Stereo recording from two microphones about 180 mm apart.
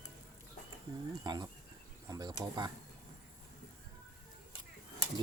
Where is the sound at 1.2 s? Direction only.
20° right (ahead or behind).